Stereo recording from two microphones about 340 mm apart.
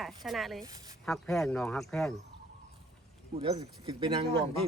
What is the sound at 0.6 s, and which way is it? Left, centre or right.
Speech, centre.